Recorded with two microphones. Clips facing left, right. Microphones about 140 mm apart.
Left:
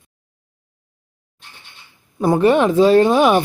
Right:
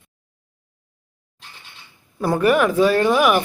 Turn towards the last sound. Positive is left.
turn(degrees=25)  # may be behind; listen again after turning